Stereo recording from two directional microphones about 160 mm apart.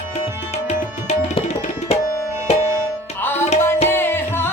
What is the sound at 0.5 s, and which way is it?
Tabla, 45° left (ahead or behind).